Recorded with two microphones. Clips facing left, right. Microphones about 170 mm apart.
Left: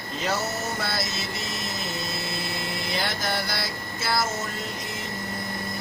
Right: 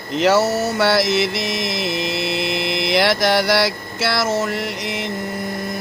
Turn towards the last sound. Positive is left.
turn(degrees=-85)